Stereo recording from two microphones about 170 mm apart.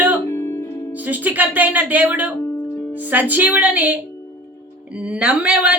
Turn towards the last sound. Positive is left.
turn(degrees=-5)  # may be behind; listen again after turning